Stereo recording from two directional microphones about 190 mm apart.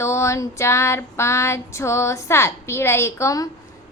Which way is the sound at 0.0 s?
15° left (ahead or behind).